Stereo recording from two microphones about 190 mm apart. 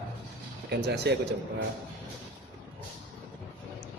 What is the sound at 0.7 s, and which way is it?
Speech, 60° right (ahead or behind).